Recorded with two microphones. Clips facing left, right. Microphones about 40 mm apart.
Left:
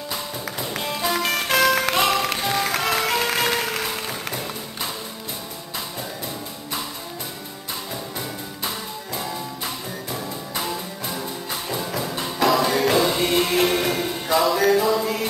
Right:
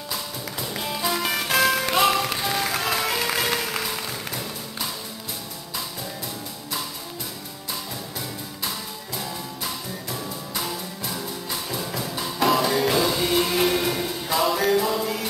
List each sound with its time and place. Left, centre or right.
0.1 s music: centre
8.6 s music: centre
14.4 s music: centre